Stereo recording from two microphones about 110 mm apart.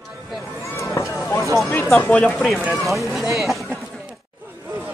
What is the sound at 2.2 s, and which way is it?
Speech, centre (ahead or behind).